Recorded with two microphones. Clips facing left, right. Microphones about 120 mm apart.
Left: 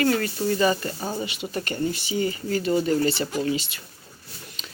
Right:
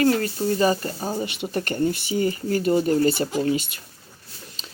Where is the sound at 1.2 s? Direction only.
55° right (ahead or behind).